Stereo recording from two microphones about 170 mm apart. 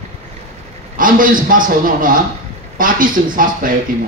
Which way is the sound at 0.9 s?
55° right (ahead or behind).